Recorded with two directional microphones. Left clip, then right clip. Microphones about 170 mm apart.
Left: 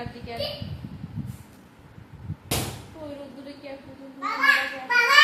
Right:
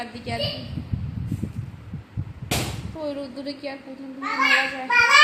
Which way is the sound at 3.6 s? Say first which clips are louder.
Right 4 dB; 75° right (ahead or behind).